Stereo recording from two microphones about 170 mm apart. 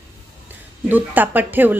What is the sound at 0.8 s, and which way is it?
Speech, 10° right (ahead or behind).